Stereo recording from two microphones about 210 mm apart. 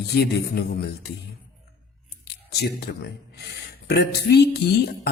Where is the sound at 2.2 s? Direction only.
50° left (ahead or behind).